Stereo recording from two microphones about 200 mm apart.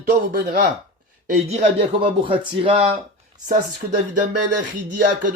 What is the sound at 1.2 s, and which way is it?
Speech, 35° right (ahead or behind).